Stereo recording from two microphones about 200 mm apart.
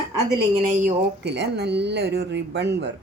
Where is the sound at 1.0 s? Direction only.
55° right (ahead or behind).